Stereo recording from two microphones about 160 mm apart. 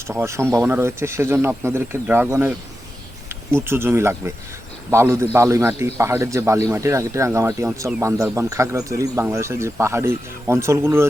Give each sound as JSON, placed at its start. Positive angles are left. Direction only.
{"t": 0.1, "sound": "speech", "side_deg": -15}